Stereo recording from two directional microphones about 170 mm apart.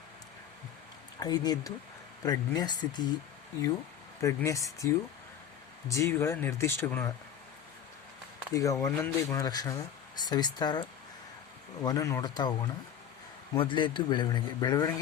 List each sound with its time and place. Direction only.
1.2 s a man's voice: 25° left (ahead or behind)
4.2 s a man's voice: 20° left (ahead or behind)
5.9 s speech: 15° left (ahead or behind)
8.5 s a man's voice: 20° left (ahead or behind)
13.6 s a man's voice: 30° left (ahead or behind)